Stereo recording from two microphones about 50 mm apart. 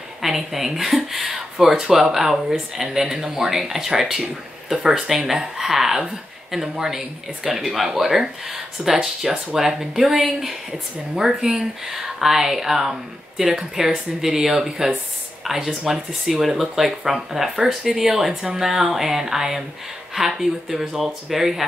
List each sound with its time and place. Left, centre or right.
0.2 s speech: centre